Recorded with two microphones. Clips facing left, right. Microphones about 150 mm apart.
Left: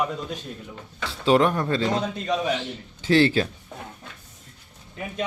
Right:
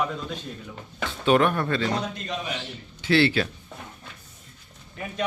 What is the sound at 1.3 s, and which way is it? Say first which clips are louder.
Speech: left 1 dB; 30° left (ahead or behind).